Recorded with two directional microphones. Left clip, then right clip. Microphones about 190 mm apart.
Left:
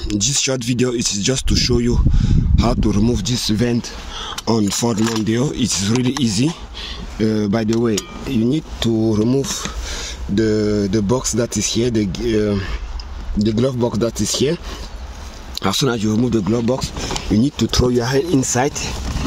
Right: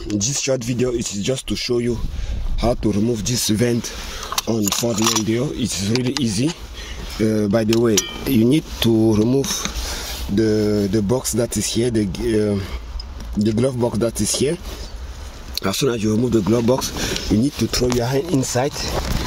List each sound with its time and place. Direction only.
0.1 s speech: 10° left (ahead or behind); by 3.7 s 5° right (ahead or behind)
4.5 s speech: 20° left (ahead or behind)
7.2 s speech: centre (ahead or behind)
15.6 s speech: 10° left (ahead or behind); by 16.9 s 10° right (ahead or behind)
17.6 s speech: centre (ahead or behind)